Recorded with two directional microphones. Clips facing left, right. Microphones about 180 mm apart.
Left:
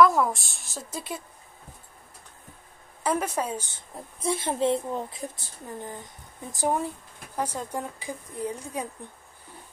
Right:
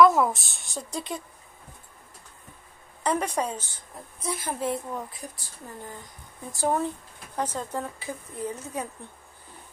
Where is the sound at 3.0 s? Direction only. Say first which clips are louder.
Even; 5° left (ahead or behind).